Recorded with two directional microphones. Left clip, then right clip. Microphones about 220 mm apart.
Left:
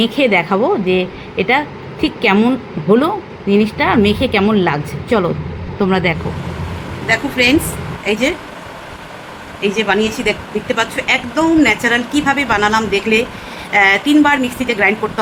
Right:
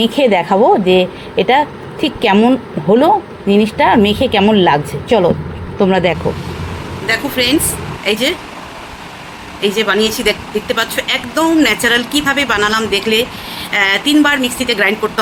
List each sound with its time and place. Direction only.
0.0 s a woman's voice: 20° right (ahead or behind)
7.1 s a woman's voice: 5° left (ahead or behind)
9.6 s a woman's voice: 5° left (ahead or behind)